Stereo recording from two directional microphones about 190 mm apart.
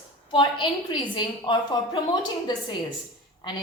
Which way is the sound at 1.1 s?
25° left (ahead or behind).